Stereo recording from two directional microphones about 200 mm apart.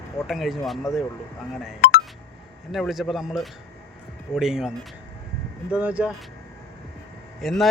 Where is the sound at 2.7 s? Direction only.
Centre (ahead or behind).